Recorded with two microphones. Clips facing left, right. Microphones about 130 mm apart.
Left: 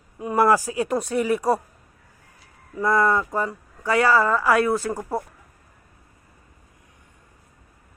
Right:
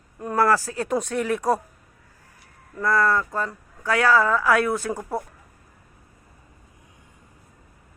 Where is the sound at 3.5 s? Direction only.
5° left (ahead or behind).